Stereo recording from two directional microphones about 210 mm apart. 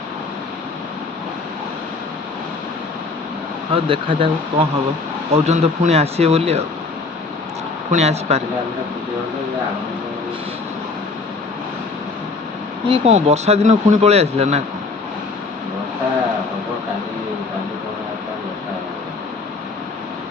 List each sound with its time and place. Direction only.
3.7 s speech: 25° right (ahead or behind)
7.9 s speech: 30° right (ahead or behind)
12.9 s speech: 30° right (ahead or behind)